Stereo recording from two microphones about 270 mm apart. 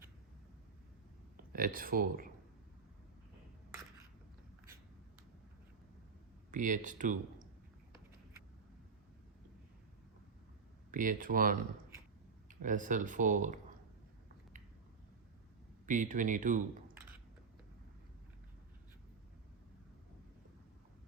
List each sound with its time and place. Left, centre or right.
1.5 s speech: right
6.5 s speech: right
10.9 s speech: right
12.6 s speech: right
15.9 s speech: right